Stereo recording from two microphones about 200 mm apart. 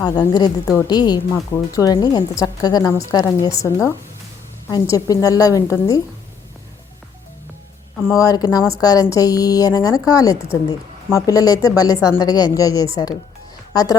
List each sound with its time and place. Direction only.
0.0 s a woman's voice: 20° left (ahead or behind)
8.1 s a woman's voice: 20° left (ahead or behind)